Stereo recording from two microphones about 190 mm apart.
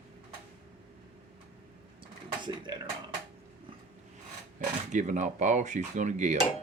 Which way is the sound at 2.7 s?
25° right (ahead or behind).